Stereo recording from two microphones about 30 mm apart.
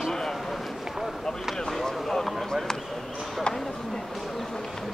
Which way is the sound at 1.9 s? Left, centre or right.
Centre.